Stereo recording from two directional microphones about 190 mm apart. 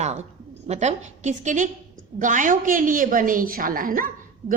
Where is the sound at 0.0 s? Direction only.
35° right (ahead or behind).